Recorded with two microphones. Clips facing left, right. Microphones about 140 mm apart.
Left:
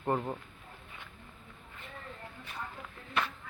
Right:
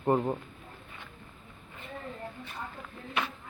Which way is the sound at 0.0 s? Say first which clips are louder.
Right 5 dB; 15° right (ahead or behind).